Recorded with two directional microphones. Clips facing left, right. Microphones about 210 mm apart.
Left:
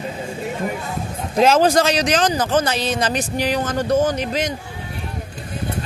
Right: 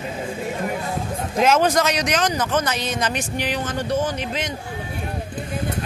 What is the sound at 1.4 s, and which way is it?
A man's voice, 30° left (ahead or behind).